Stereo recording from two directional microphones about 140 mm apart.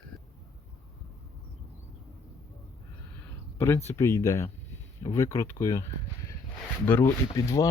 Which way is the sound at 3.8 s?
20° left (ahead or behind).